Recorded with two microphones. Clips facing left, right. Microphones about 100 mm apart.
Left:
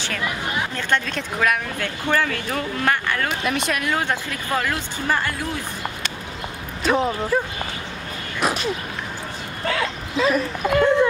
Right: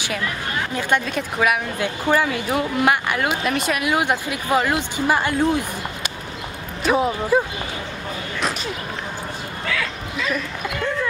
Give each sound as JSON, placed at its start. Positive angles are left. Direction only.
{"t": 0.7, "sound": "speech", "side_deg": -10}
{"t": 3.4, "sound": "speech", "side_deg": 0}
{"t": 6.8, "sound": "speech", "side_deg": -5}
{"t": 9.7, "sound": "speech", "side_deg": 35}